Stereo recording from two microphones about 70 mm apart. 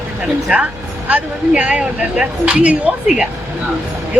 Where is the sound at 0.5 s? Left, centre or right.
Centre.